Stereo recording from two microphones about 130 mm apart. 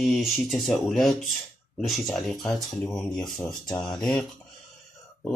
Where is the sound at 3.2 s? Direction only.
30° left (ahead or behind).